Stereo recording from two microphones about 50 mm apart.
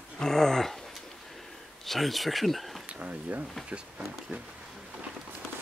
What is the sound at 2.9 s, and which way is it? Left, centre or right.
Speech, right.